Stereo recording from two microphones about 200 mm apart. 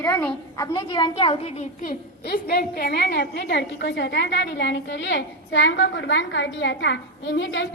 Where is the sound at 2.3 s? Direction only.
50° left (ahead or behind).